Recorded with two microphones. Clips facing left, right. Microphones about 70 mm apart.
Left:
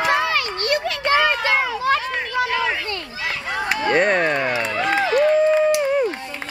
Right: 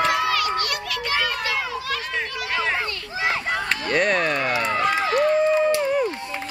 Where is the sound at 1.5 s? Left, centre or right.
Left.